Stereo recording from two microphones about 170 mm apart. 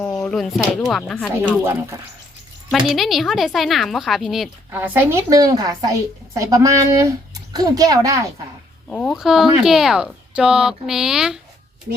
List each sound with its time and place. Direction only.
0.3 s a woman's voice: centre (ahead or behind)
1.4 s speech: 15° right (ahead or behind)
2.7 s a woman's voice: centre (ahead or behind)
4.8 s a woman's voice: 15° right (ahead or behind)
8.9 s a woman's voice: 5° left (ahead or behind)